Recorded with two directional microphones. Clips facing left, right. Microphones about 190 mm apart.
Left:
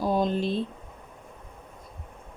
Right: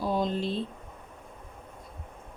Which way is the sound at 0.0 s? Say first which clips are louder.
Left 3 dB; 50° left (ahead or behind).